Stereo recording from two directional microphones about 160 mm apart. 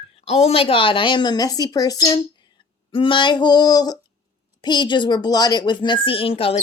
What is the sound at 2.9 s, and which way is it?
A woman's voice, 35° left (ahead or behind).